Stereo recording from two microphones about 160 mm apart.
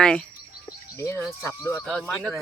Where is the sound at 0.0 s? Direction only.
5° left (ahead or behind).